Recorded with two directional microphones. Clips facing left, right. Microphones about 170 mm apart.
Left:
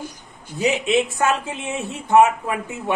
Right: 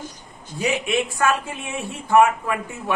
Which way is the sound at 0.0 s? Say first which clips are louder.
Left 2 dB; 10° left (ahead or behind).